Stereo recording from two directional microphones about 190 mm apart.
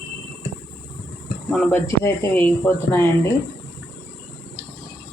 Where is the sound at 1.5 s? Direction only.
5° left (ahead or behind).